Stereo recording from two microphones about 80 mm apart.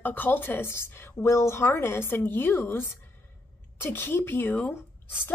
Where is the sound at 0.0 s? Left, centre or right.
Left.